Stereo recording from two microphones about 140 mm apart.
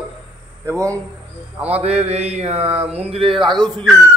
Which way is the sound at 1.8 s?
50° right (ahead or behind).